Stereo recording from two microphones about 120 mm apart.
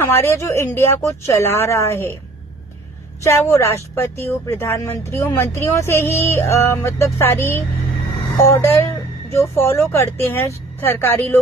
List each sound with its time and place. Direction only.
0.0 s speech: 20° left (ahead or behind)
3.3 s speech: 20° left (ahead or behind)